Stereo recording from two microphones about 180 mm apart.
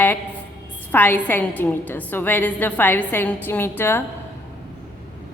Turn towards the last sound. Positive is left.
turn(degrees=10)  # may be behind; listen again after turning